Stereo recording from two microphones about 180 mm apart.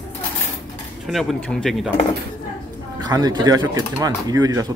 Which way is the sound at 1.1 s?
5° left (ahead or behind).